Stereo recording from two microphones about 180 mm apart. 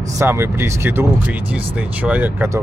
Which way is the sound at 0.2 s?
15° right (ahead or behind).